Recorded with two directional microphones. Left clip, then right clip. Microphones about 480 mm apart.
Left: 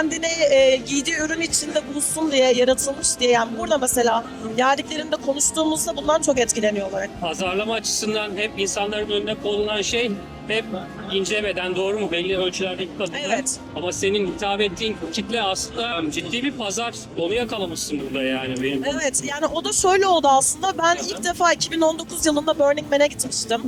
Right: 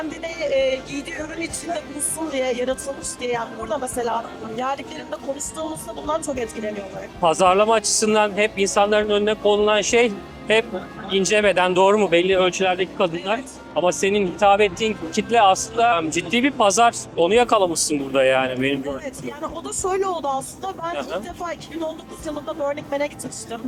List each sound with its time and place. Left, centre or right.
0.2 s speech: left
7.2 s a man's voice: right
11.2 s speech: right
13.8 s a man's voice: right
18.9 s speech: left